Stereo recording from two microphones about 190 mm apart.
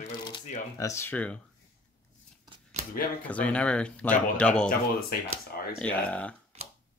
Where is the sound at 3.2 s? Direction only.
5° left (ahead or behind).